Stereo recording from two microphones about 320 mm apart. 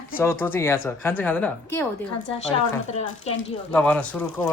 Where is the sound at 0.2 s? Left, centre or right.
Centre.